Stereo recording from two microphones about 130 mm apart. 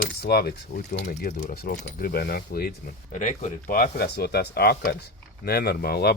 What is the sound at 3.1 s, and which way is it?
Speech, 70° left (ahead or behind).